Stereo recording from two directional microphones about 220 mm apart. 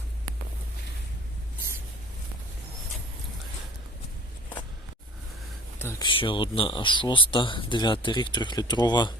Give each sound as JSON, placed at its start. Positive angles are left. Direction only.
{"t": 5.8, "sound": "speech", "side_deg": 15}